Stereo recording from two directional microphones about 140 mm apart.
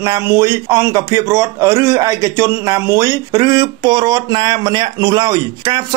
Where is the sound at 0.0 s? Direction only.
25° right (ahead or behind).